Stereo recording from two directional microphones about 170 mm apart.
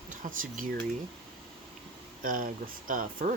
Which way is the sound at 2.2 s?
55° right (ahead or behind).